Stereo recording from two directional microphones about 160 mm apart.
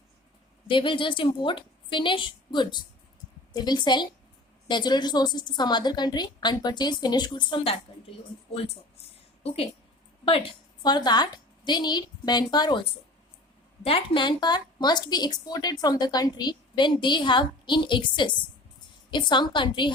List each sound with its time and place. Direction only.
0.7 s a woman's voice: 30° left (ahead or behind)